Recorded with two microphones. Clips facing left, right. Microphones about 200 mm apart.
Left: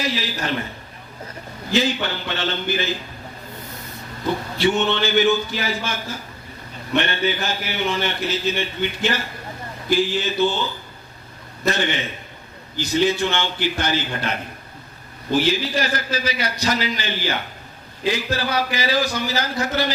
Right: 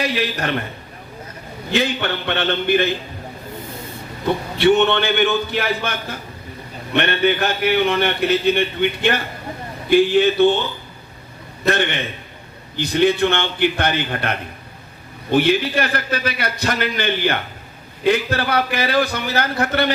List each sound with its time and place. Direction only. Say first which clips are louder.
0.0 s a man's voice: right 4 dB; 60° right (ahead or behind)
1.7 s a man's voice: right 1 dB; 60° right (ahead or behind)
4.5 s a man's voice: right 6 dB; 60° right (ahead or behind)
11.6 s a man's voice: right 3 dB; 60° right (ahead or behind)